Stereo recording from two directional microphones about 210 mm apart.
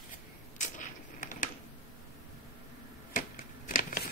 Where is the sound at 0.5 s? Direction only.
35° left (ahead or behind).